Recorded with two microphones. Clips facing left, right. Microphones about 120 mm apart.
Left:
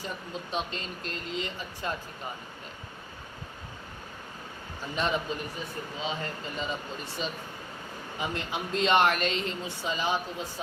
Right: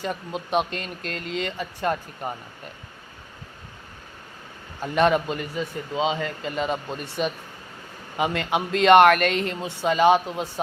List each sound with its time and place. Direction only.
0.0 s a man's voice: 70° right (ahead or behind)
4.8 s a man's voice: 60° right (ahead or behind)